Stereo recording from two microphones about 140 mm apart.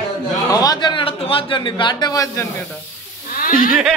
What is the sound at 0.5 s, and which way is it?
A man's voice, 30° left (ahead or behind).